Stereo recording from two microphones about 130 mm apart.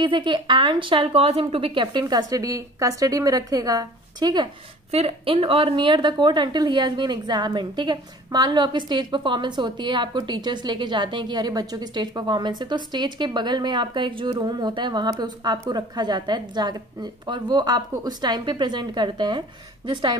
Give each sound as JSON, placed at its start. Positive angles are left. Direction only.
{"t": 0.0, "sound": "a woman's voice", "side_deg": -40}
{"t": 4.9, "sound": "a woman's voice", "side_deg": -45}